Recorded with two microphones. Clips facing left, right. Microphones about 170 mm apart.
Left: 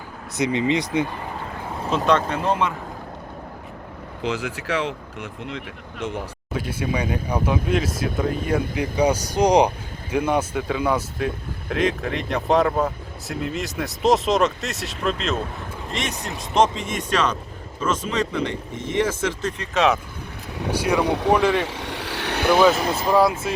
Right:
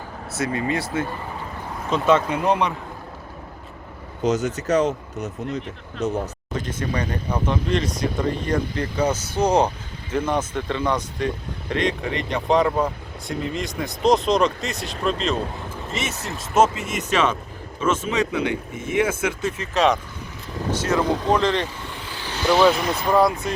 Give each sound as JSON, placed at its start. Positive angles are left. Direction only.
{"t": 0.3, "sound": "speech", "side_deg": 20}
{"t": 2.0, "sound": "speech", "side_deg": -10}
{"t": 4.8, "sound": "speech", "side_deg": -40}
{"t": 6.5, "sound": "speech", "side_deg": 10}
{"t": 20.7, "sound": "speech", "side_deg": 10}
{"t": 21.7, "sound": "vehicle", "side_deg": 75}
{"t": 22.5, "sound": "speech", "side_deg": 5}